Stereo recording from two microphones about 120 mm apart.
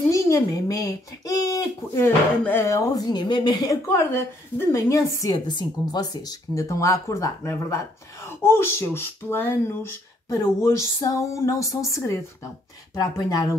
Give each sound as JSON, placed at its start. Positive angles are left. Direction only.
{"t": 0.1, "sound": "speech", "side_deg": 25}
{"t": 2.0, "sound": "speech", "side_deg": 20}